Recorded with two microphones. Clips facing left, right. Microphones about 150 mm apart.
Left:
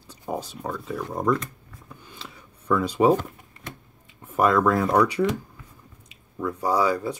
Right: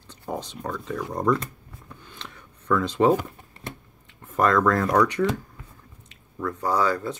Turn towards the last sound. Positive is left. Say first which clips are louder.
# left 1 dB
turn(degrees=10)  # may be behind; listen again after turning